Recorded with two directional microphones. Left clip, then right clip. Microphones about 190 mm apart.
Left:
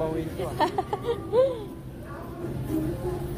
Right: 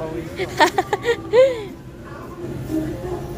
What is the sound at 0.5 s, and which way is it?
Speech, 20° right (ahead or behind).